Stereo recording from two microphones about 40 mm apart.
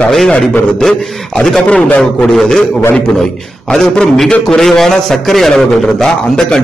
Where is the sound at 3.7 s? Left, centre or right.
Centre.